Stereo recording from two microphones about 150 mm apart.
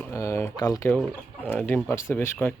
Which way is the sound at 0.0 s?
20° left (ahead or behind).